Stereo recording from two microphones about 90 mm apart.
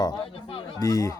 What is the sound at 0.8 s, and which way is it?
Speech, 40° left (ahead or behind).